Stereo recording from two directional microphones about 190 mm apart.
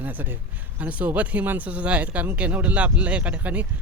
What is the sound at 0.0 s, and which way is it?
A man's voice, 10° right (ahead or behind).